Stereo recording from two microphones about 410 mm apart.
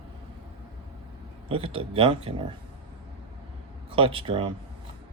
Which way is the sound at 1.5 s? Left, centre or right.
Centre.